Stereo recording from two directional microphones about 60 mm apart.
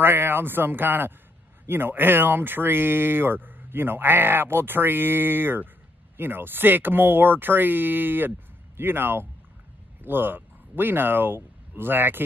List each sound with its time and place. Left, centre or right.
0.0 s speech: right